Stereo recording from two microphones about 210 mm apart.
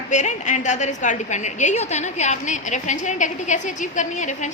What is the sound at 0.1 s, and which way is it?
A woman's voice, 35° left (ahead or behind).